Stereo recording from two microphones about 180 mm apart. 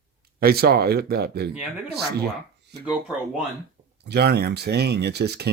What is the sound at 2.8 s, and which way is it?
Speech, 5° right (ahead or behind).